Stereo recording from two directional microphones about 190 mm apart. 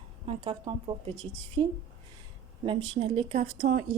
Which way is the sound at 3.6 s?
45° right (ahead or behind).